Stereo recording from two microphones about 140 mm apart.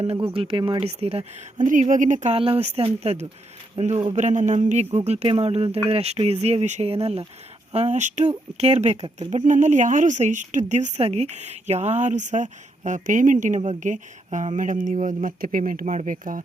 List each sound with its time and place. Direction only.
0.0 s speech: 45° right (ahead or behind)
1.6 s a woman's voice: 70° right (ahead or behind)
2.3 s speech: 45° right (ahead or behind)
9.1 s a woman's voice: 60° right (ahead or behind)